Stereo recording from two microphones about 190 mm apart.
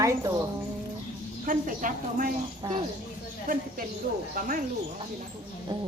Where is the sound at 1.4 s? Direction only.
45° right (ahead or behind).